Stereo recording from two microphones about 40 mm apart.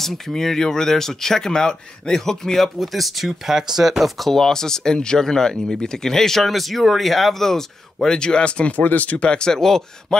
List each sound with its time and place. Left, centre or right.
0.0 s speech: centre
3.3 s speech: centre
4.0 s speech: centre; by 8.7 s left
8.7 s speech: left
9.3 s speech: centre